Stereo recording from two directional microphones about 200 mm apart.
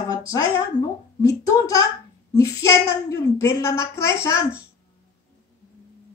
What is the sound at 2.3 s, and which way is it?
Speech, 15° left (ahead or behind).